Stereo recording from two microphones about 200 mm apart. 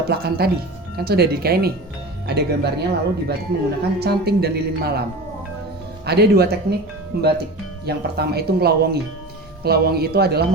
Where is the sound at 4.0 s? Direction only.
50° right (ahead or behind).